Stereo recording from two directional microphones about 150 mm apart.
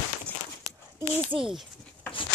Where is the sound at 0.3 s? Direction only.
10° left (ahead or behind).